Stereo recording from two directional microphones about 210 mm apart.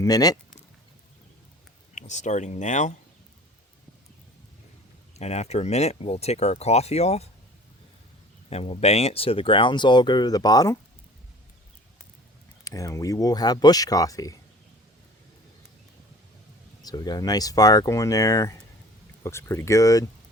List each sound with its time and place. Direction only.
0.0 s speech: 20° left (ahead or behind)
2.0 s speech: 35° left (ahead or behind)
5.1 s speech: 30° left (ahead or behind)
8.4 s speech: 30° left (ahead or behind)
12.6 s speech: 15° left (ahead or behind)
16.8 s speech: 20° left (ahead or behind)